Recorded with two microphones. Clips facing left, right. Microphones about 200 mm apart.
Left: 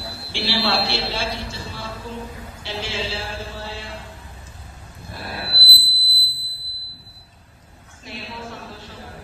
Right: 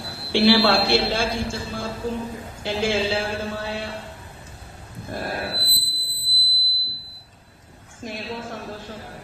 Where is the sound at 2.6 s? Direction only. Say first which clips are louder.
Right 7 dB; 50° right (ahead or behind).